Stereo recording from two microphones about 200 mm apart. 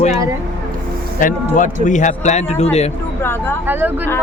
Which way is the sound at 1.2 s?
40° left (ahead or behind).